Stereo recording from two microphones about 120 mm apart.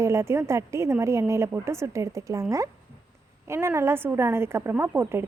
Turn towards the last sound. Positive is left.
turn(degrees=-20)  # may be behind; listen again after turning